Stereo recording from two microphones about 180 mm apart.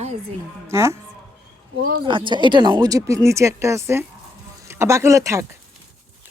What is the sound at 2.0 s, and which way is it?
Speech, 25° right (ahead or behind).